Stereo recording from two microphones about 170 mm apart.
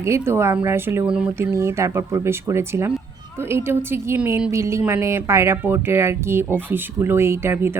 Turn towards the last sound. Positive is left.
turn(degrees=-15)  # may be behind; listen again after turning